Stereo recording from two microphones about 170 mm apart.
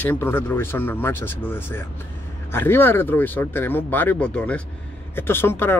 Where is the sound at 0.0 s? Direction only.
10° left (ahead or behind).